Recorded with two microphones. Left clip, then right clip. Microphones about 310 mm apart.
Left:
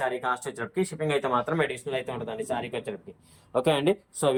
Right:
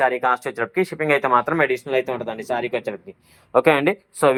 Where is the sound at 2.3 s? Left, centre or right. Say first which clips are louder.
Right 5 dB; centre.